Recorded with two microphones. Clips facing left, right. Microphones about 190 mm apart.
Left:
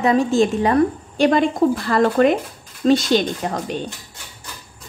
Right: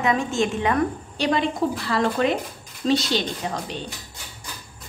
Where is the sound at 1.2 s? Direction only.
50° left (ahead or behind).